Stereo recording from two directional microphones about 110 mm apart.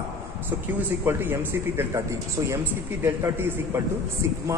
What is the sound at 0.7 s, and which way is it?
A man's voice, 20° right (ahead or behind).